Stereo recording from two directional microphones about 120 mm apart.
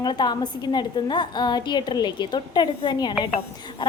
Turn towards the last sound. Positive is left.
turn(degrees=35)  # may be behind; listen again after turning